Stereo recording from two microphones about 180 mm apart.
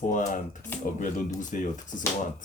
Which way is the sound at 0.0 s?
45° left (ahead or behind).